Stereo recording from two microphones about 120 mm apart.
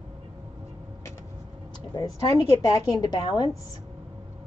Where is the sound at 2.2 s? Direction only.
30° left (ahead or behind).